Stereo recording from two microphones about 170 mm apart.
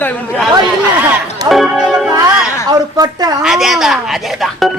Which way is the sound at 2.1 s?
20° right (ahead or behind).